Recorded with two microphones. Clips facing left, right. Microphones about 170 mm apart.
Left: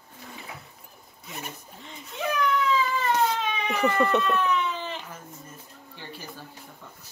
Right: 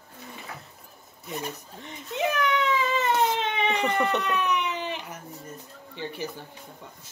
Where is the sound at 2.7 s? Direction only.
20° right (ahead or behind).